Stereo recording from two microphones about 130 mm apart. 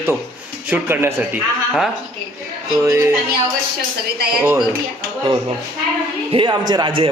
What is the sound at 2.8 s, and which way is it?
Speech, 25° right (ahead or behind).